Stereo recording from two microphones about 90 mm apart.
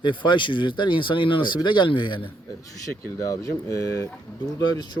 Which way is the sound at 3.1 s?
40° left (ahead or behind).